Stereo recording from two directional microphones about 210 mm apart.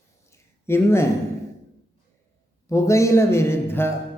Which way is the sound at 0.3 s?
10° left (ahead or behind).